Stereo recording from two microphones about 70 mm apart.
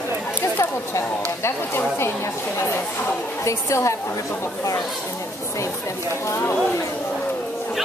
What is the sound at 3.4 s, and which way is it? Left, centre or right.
Speech, left.